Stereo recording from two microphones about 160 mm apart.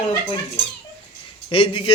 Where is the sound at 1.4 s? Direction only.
35° left (ahead or behind).